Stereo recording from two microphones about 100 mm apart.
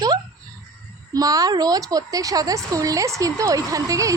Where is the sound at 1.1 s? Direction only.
35° right (ahead or behind).